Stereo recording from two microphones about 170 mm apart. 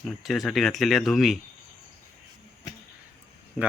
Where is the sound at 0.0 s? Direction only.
Centre (ahead or behind).